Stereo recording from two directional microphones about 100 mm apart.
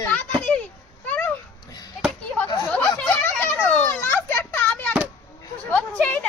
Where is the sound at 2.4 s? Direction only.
35° left (ahead or behind).